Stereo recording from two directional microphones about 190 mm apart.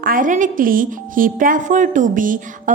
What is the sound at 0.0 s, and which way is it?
A woman's voice, 45° right (ahead or behind).